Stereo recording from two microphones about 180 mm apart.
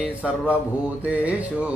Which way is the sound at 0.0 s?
5° right (ahead or behind).